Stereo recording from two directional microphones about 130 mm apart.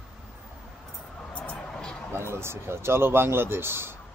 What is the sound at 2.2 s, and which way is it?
A man's voice, 20° right (ahead or behind).